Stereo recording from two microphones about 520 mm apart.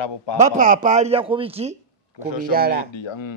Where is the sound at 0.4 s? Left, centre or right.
Centre.